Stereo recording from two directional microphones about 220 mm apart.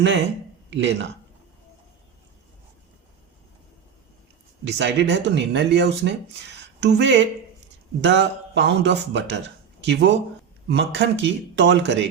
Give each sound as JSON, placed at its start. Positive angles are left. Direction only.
{"t": 0.0, "sound": "speech", "side_deg": -50}
{"t": 4.6, "sound": "speech", "side_deg": -50}